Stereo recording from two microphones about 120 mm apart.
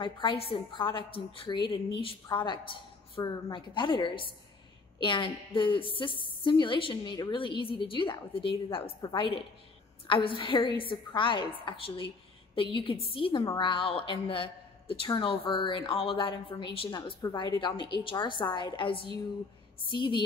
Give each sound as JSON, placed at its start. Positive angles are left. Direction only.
{"t": 0.0, "sound": "a woman's voice", "side_deg": 45}
{"t": 17.2, "sound": "a woman's voice", "side_deg": 35}